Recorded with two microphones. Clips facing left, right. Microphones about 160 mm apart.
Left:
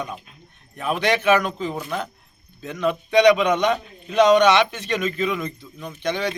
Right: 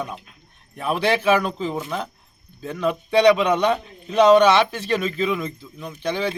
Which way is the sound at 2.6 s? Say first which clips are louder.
Even; 35° right (ahead or behind).